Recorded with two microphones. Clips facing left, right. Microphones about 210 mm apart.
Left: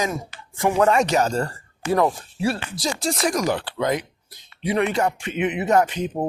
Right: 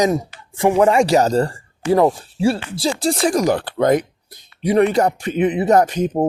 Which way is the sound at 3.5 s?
45° right (ahead or behind).